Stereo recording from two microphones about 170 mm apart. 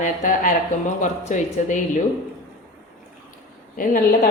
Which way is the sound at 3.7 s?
55° left (ahead or behind).